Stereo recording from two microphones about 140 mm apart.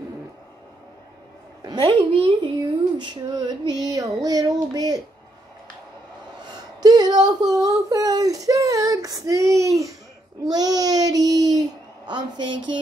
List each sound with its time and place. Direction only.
1.6 s a sound: 30° right (ahead or behind)
1.9 s speech: 40° right (ahead or behind)
6.4 s speech: 30° right (ahead or behind)
10.5 s child singing: 25° right (ahead or behind)
12.1 s speech: 35° right (ahead or behind)